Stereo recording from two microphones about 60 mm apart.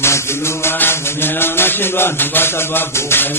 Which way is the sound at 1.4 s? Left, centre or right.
Left.